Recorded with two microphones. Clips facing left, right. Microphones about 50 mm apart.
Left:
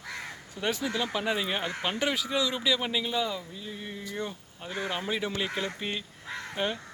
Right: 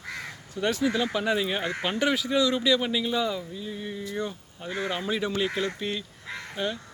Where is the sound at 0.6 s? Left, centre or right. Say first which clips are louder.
Right 5 dB; centre.